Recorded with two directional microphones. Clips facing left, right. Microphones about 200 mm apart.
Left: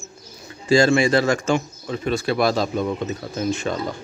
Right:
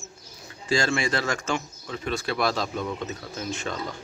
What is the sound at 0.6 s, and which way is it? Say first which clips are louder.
Speech: left 9 dB; 10° left (ahead or behind).